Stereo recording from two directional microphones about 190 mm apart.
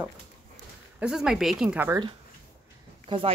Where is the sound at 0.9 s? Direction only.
5° right (ahead or behind).